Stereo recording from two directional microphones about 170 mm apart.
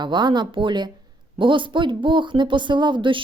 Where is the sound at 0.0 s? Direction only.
25° right (ahead or behind).